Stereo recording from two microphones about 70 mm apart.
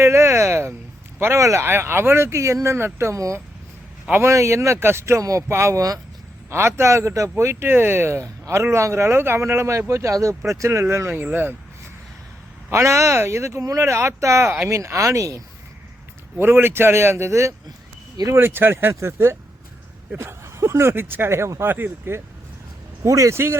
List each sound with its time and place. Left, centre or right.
0.0 s speech: right
1.6 s speech: right
8.2 s speech: right
12.7 s speech: right
16.4 s speech: right
18.3 s speech: right
23.0 s speech: right